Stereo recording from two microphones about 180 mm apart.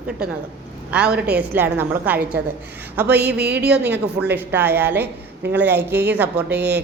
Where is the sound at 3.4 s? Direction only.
65° right (ahead or behind).